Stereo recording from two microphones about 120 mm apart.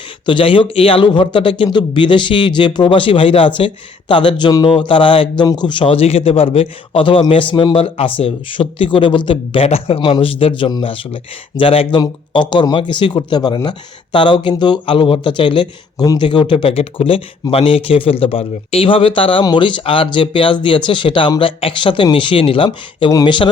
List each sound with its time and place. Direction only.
0.3 s speech: 45° left (ahead or behind)
10.0 s speech: 45° left (ahead or behind)